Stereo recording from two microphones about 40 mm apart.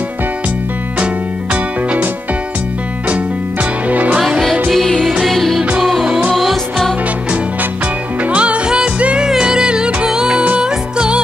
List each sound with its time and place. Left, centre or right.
0.9 s music: right
3.9 s music: right
4.2 s music: centre
8.3 s music: right